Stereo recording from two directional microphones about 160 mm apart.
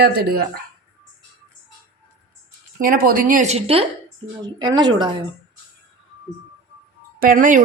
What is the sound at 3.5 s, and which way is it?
Speech, 35° right (ahead or behind).